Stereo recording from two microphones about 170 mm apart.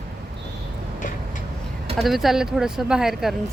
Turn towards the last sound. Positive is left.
turn(degrees=0)  # may be behind; listen again after turning